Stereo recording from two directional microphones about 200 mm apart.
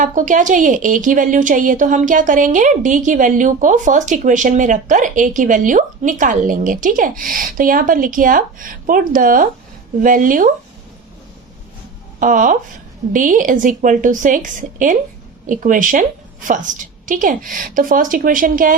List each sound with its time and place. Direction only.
0.0 s a woman's voice: 40° right (ahead or behind)
12.2 s a woman's voice: 40° right (ahead or behind)